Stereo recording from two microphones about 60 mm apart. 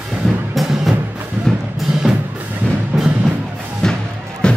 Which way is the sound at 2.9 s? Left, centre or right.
Centre.